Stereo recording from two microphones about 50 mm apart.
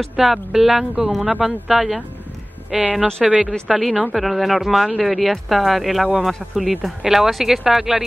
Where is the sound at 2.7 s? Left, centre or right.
Right.